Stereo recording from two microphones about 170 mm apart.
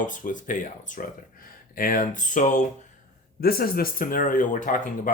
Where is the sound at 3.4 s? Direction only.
60° left (ahead or behind).